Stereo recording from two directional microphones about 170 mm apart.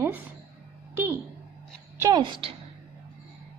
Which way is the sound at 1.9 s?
25° right (ahead or behind).